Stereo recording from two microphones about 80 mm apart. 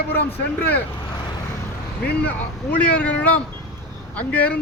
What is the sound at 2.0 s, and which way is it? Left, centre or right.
A man's voice, centre.